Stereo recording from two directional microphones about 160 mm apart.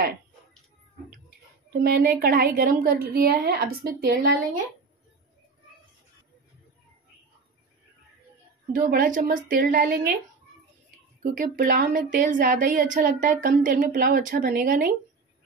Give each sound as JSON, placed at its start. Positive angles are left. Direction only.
{"t": 1.7, "sound": "a woman's voice", "side_deg": -70}
{"t": 8.7, "sound": "a woman's voice", "side_deg": -65}
{"t": 11.2, "sound": "a woman's voice", "side_deg": -60}